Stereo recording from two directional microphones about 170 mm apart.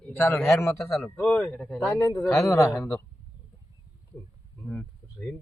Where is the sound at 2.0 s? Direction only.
15° left (ahead or behind).